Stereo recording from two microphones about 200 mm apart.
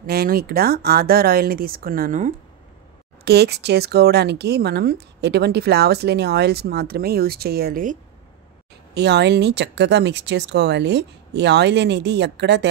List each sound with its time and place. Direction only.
0.0 s speech: 50° right (ahead or behind)
3.3 s speech: 55° right (ahead or behind)
8.9 s speech: 55° right (ahead or behind)